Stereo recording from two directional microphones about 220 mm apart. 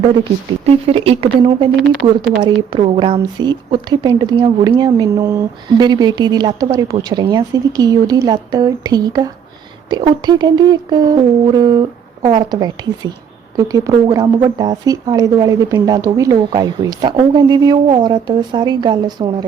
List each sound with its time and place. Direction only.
0.9 s speech: 25° right (ahead or behind)
1.7 s speech: centre (ahead or behind)
2.4 s speech: 25° right (ahead or behind)